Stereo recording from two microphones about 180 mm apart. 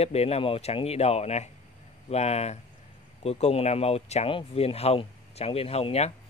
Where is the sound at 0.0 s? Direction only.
35° left (ahead or behind).